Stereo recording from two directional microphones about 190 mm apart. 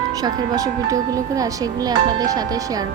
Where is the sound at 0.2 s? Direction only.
20° right (ahead or behind).